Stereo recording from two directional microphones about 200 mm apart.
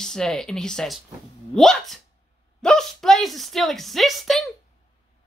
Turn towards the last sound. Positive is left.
turn(degrees=0)  # may be behind; listen again after turning